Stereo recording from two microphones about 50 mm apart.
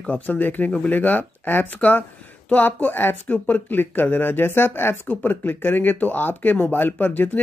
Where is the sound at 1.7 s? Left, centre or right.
Left.